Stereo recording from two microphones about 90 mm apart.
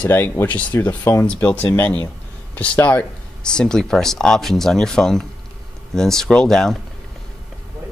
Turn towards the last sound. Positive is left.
turn(degrees=5)  # may be behind; listen again after turning